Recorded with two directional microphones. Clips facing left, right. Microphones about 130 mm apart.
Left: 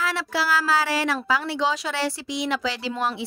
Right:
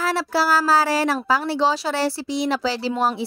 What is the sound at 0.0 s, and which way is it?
A woman's voice, 35° right (ahead or behind).